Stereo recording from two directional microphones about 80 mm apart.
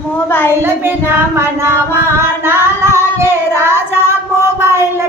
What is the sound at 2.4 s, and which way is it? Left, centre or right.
Child singing, right.